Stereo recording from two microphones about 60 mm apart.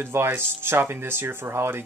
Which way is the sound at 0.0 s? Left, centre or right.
Right.